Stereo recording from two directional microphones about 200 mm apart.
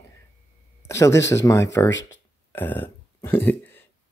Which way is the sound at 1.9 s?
65° left (ahead or behind).